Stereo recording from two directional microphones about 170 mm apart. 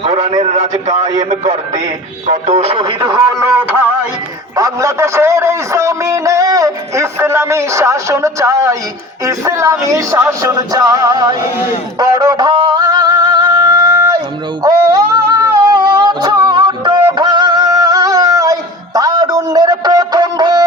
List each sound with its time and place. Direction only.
0.0 s a man's voice: 35° right (ahead or behind)
2.2 s music: 40° right (ahead or behind); by 3.4 s 20° right (ahead or behind)
4.5 s a man's voice: 20° right (ahead or behind)
9.2 s music: 15° right (ahead or behind)
14.6 s singing: 20° right (ahead or behind)